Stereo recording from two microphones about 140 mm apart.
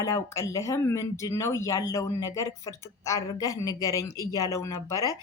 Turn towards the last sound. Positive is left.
turn(degrees=25)  # may be behind; listen again after turning